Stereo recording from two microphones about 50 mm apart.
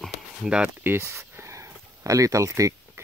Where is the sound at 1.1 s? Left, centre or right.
Right.